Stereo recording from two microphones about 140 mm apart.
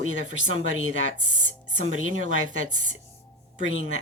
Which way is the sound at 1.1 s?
65° right (ahead or behind).